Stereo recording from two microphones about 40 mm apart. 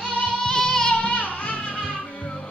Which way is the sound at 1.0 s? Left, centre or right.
Left.